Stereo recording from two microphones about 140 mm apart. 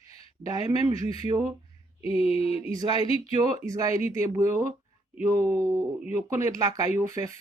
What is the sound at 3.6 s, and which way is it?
Speech, 25° right (ahead or behind).